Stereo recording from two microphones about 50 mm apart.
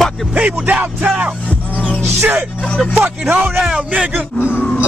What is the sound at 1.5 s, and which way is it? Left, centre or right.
Music, left.